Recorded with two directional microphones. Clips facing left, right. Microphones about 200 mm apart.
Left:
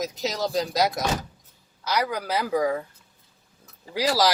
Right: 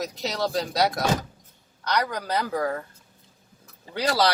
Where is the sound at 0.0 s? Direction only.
Centre (ahead or behind).